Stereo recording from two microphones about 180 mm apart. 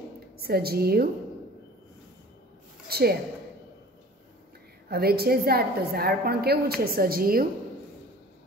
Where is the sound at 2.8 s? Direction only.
60° right (ahead or behind).